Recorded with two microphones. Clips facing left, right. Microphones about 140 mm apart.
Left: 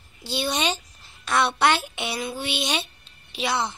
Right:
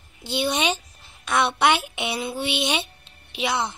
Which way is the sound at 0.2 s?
20° right (ahead or behind).